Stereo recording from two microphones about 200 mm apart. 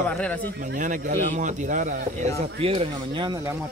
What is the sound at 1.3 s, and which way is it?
Speech, 40° right (ahead or behind).